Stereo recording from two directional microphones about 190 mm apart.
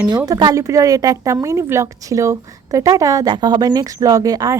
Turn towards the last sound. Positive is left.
turn(degrees=-20)  # may be behind; listen again after turning